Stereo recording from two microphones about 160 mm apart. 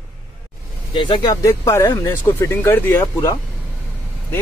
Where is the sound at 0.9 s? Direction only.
35° left (ahead or behind).